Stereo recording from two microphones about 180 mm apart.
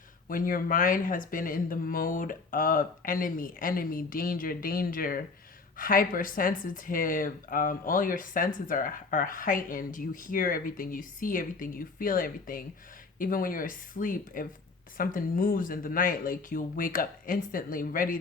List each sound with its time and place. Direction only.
0.3 s speech: 50° left (ahead or behind)